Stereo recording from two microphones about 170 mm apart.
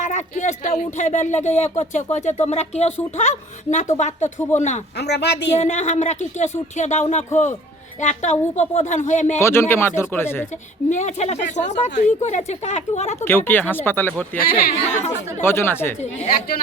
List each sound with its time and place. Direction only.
0.0 s speech: 45° left (ahead or behind)
4.9 s a woman's voice: 80° left
5.5 s speech: 45° left (ahead or behind)
9.4 s speech: 15° left (ahead or behind)
10.8 s speech: 45° left (ahead or behind)
13.1 s speech: 15° left (ahead or behind)
14.7 s speech: 40° left (ahead or behind)
15.4 s speech: 15° left (ahead or behind)